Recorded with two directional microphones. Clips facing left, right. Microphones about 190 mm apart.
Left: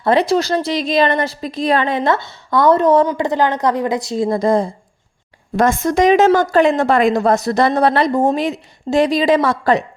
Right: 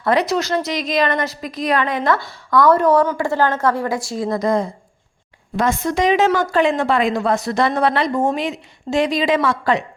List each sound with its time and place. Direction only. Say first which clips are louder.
0.0 s speech: left 3 dB; 30° left (ahead or behind)
5.5 s a woman's voice: left 4 dB; 45° left (ahead or behind)